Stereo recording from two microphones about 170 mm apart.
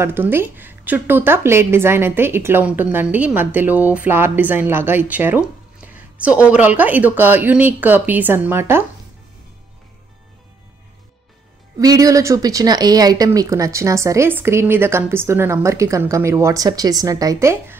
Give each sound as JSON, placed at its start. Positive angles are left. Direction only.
{"t": 0.0, "sound": "a woman's voice", "side_deg": -15}
{"t": 11.8, "sound": "a woman's voice", "side_deg": -20}